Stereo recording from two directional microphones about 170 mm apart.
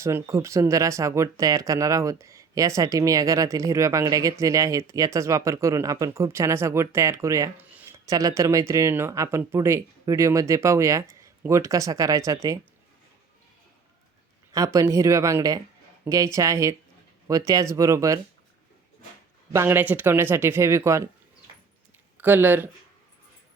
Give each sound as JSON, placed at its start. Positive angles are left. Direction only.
{"t": 0.0, "sound": "speech", "side_deg": -15}
{"t": 14.5, "sound": "speech", "side_deg": -20}
{"t": 19.5, "sound": "speech", "side_deg": -15}
{"t": 22.2, "sound": "speech", "side_deg": -10}